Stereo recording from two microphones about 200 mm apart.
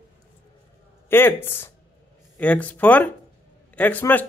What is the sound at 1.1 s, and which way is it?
Speech, 10° left (ahead or behind).